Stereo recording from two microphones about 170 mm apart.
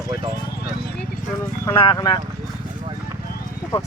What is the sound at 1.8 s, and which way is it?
Speech, 25° left (ahead or behind).